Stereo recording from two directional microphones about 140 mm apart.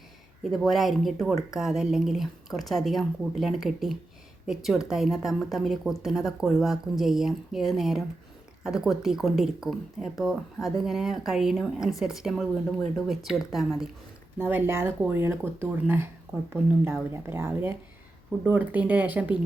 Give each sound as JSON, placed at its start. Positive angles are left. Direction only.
{"t": 0.5, "sound": "speech", "side_deg": 0}
{"t": 14.3, "sound": "speech", "side_deg": -15}